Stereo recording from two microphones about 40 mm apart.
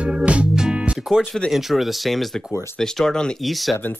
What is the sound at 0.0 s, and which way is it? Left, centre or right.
Music, right.